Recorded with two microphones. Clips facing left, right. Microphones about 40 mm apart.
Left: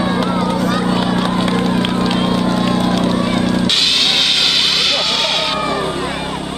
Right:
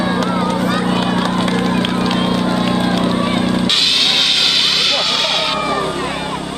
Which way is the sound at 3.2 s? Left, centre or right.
Centre.